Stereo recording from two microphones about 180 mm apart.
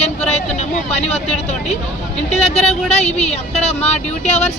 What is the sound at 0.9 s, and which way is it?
Speech, 35° left (ahead or behind).